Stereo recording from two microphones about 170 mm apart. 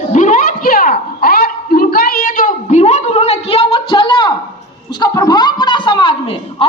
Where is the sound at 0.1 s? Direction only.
50° left (ahead or behind).